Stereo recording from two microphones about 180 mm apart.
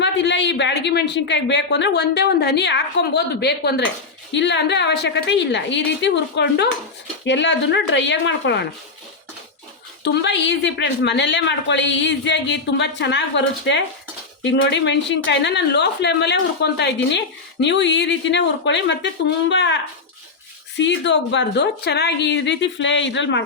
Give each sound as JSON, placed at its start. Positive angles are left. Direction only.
{"t": 0.0, "sound": "a woman's voice", "side_deg": 80}
{"t": 4.3, "sound": "a woman's voice", "side_deg": 80}
{"t": 7.3, "sound": "a woman's voice", "side_deg": 90}
{"t": 10.0, "sound": "a woman's voice", "side_deg": 70}